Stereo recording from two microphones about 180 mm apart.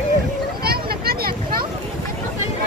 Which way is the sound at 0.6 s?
60° right (ahead or behind).